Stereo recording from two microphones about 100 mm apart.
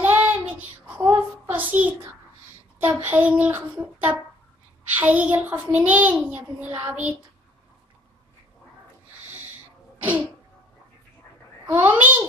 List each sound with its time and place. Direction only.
0.0 s child singing: 20° right (ahead or behind)
1.1 s a sound: 20° right (ahead or behind)
2.8 s a child's voice: 15° right (ahead or behind)
11.6 s a child's voice: 20° right (ahead or behind)